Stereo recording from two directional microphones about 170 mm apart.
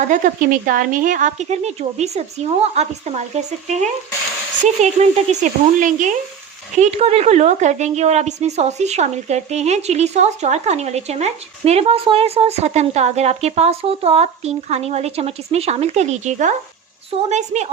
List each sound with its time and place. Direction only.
0.1 s speech: 50° right (ahead or behind)